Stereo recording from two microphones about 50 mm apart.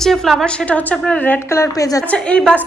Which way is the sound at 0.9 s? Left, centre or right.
Centre.